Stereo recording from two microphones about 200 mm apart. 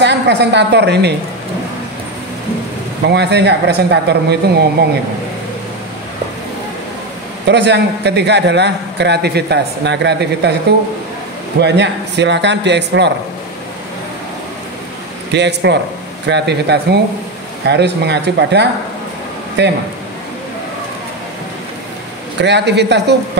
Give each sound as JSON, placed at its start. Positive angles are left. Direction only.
{"t": 0.0, "sound": "a woman's voice", "side_deg": -60}
{"t": 3.1, "sound": "a man's voice", "side_deg": -55}
{"t": 7.4, "sound": "a man's voice", "side_deg": -60}
{"t": 11.6, "sound": "a man's voice", "side_deg": -60}
{"t": 15.3, "sound": "a man's voice", "side_deg": -60}
{"t": 22.4, "sound": "a man's voice", "side_deg": -60}